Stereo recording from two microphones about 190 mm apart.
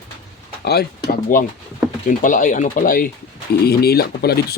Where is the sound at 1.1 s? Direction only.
45° left (ahead or behind).